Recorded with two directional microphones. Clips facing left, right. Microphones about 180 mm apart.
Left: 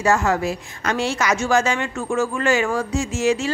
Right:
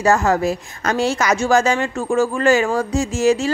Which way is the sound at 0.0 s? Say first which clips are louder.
Right 3 dB; 40° right (ahead or behind).